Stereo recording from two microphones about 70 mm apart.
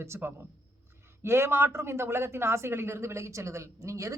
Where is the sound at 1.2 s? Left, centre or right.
Right.